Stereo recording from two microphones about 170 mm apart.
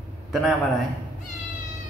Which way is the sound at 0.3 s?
Centre (ahead or behind).